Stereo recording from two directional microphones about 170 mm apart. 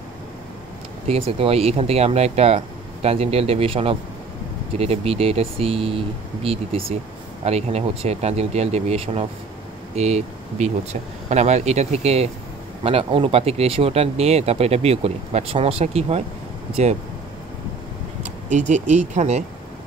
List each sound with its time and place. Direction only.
1.0 s speech: 35° right (ahead or behind)
18.5 s speech: 45° right (ahead or behind)